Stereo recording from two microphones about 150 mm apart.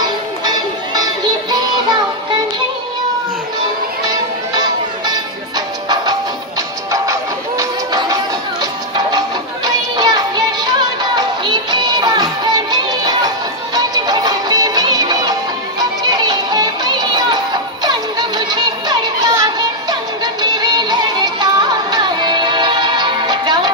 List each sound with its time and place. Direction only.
0.0 s music: 25° right (ahead or behind)
4.0 s music: 25° right (ahead or behind)
6.9 s music: 20° right (ahead or behind)
20.5 s music: 30° right (ahead or behind)